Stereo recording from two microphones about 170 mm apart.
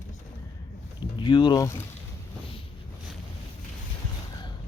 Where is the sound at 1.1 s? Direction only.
30° left (ahead or behind).